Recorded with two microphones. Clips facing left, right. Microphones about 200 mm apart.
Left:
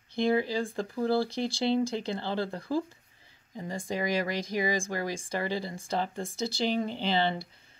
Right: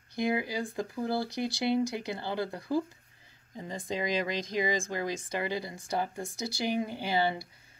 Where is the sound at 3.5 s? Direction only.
20° right (ahead or behind).